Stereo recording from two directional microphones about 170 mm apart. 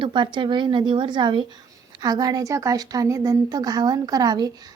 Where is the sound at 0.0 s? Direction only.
30° right (ahead or behind).